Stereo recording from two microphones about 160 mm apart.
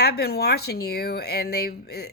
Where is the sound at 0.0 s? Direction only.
85° left.